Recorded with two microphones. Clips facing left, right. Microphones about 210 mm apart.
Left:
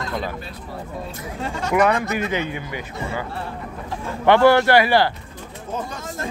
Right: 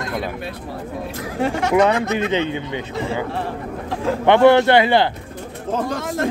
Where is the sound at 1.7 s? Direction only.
25° right (ahead or behind).